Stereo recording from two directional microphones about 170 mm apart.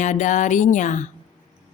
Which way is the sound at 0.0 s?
45° left (ahead or behind).